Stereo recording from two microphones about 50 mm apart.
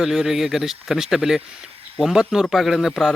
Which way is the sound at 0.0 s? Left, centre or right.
Centre.